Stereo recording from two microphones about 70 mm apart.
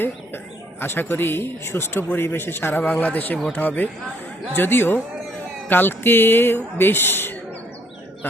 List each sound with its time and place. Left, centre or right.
0.8 s speech: left